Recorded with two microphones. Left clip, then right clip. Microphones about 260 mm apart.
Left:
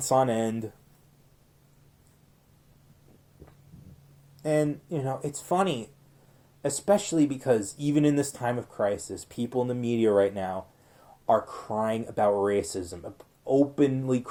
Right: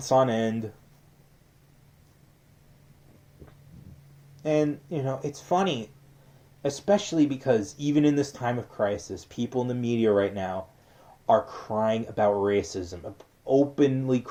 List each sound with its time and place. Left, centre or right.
0.0 s speech: left
4.4 s speech: left